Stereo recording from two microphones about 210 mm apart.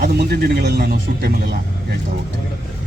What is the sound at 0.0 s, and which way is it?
Speech, 45° right (ahead or behind).